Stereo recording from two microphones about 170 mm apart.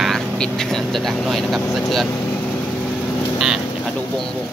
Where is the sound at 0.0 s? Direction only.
5° left (ahead or behind).